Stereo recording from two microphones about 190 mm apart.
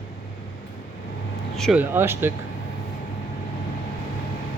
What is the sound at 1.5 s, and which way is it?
Speech, centre (ahead or behind).